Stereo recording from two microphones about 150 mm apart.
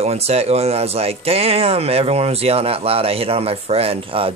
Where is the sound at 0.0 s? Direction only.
45° right (ahead or behind).